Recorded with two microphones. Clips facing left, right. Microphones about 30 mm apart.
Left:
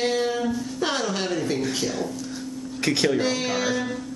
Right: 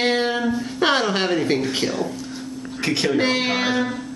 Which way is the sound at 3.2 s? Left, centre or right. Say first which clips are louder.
Right 4 dB; right.